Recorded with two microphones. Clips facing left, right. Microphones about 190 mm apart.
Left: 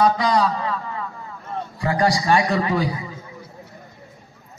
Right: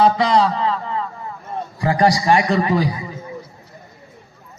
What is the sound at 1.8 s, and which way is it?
Speech, 20° right (ahead or behind).